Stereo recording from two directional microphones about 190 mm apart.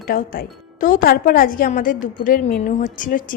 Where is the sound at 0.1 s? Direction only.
50° left (ahead or behind).